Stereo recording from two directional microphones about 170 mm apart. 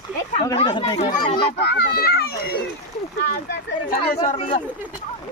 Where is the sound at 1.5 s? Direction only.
70° left (ahead or behind).